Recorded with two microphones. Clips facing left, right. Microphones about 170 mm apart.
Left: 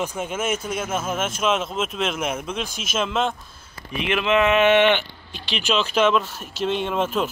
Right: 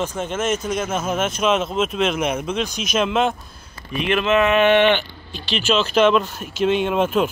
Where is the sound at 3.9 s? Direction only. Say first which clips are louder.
Right 2 dB; 15° left (ahead or behind); by 7.3 s 5° right (ahead or behind).